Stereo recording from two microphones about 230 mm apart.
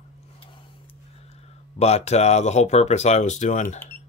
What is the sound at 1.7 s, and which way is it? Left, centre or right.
Speech, left.